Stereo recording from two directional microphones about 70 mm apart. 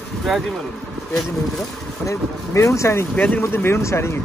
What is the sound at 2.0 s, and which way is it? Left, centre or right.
Speech, left.